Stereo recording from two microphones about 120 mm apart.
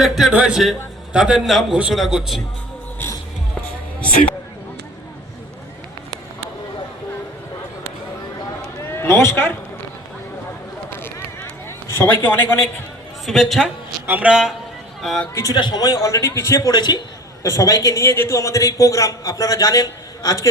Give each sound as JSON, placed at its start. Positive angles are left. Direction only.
{"t": 0.0, "sound": "a man's voice", "side_deg": -5}
{"t": 4.0, "sound": "speech", "side_deg": 10}
{"t": 8.8, "sound": "a sound", "side_deg": 20}
{"t": 11.9, "sound": "a man's voice", "side_deg": 20}
{"t": 13.2, "sound": "a man's voice", "side_deg": 0}
{"t": 15.5, "sound": "a man's voice", "side_deg": 35}